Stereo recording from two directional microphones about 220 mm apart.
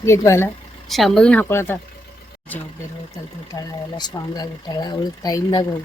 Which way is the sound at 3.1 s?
15° left (ahead or behind).